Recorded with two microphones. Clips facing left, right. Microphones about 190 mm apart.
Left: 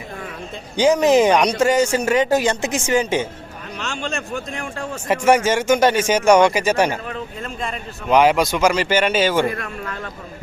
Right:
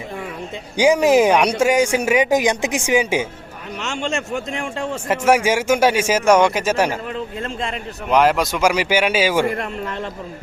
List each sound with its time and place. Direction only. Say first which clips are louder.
0.8 s speech: even; 10° right (ahead or behind)
4.0 s a man's voice: right 4 dB; 25° right (ahead or behind)
5.0 s speech: left 1 dB; 5° right (ahead or behind)
8.1 s speech: left 1 dB; centre (ahead or behind)
9.6 s a man's voice: right 4 dB; 25° right (ahead or behind)